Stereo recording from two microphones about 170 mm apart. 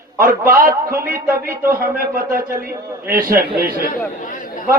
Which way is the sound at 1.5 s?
15° right (ahead or behind).